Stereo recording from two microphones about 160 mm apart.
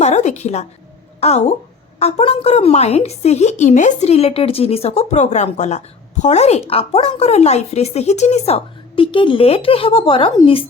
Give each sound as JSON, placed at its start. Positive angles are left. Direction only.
{"t": 0.0, "sound": "a woman's voice", "side_deg": 45}